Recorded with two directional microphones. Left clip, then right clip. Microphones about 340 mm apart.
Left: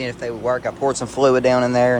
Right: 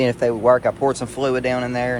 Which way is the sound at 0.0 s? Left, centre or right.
Centre.